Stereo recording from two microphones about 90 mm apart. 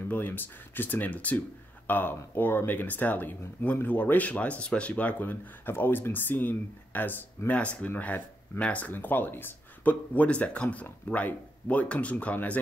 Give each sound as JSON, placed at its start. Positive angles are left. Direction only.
{"t": 0.1, "sound": "speech", "side_deg": 20}